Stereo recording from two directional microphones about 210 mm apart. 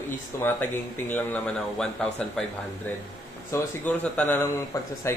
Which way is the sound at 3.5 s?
5° left (ahead or behind).